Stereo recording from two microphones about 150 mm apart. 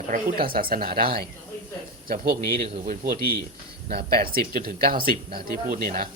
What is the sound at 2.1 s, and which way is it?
A man's voice, 75° right (ahead or behind).